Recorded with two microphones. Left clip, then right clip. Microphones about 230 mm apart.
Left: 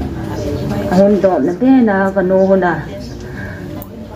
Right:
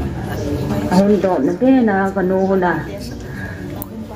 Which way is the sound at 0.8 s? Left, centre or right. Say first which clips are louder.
Left 4 dB; left.